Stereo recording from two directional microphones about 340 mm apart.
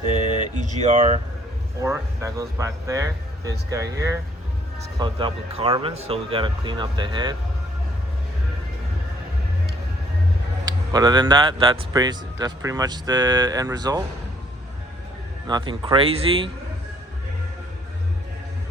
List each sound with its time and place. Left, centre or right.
0.6 s speech: right
10.7 s speech: centre
15.4 s speech: centre